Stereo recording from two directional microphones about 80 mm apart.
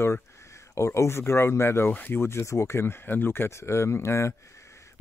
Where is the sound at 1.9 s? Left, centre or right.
Centre.